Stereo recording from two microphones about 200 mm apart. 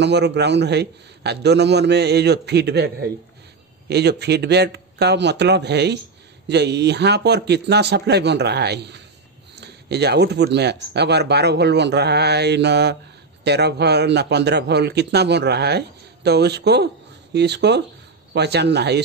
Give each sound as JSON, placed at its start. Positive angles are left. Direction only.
{"t": 0.0, "sound": "speech", "side_deg": -55}